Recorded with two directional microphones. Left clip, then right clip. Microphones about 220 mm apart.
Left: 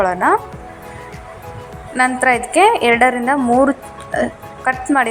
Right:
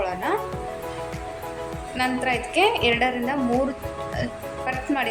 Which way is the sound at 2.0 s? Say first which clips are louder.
Left 10 dB; 20° left (ahead or behind).